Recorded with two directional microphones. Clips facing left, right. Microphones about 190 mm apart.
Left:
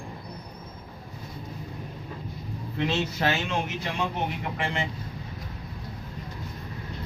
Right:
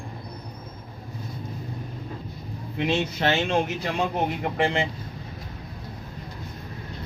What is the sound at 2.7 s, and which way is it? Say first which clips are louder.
Speech: right 2 dB; 15° right (ahead or behind).